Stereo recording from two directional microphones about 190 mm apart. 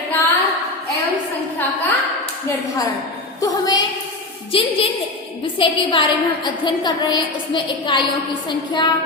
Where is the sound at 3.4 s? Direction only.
20° left (ahead or behind).